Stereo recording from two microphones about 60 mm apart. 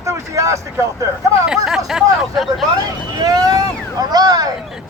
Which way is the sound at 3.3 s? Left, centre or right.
Right.